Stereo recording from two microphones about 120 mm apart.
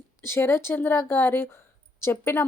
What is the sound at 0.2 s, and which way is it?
Speech, 20° left (ahead or behind).